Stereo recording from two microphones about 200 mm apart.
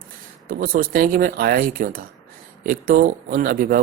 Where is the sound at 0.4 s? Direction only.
45° right (ahead or behind).